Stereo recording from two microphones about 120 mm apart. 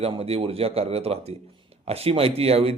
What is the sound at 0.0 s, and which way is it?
A man's voice, 55° right (ahead or behind).